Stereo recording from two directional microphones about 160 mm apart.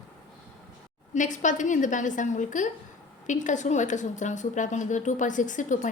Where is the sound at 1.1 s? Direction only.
50° left (ahead or behind).